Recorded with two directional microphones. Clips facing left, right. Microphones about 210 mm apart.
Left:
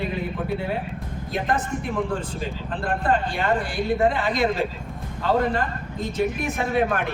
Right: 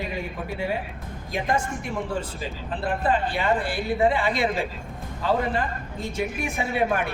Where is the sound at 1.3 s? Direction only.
10° right (ahead or behind).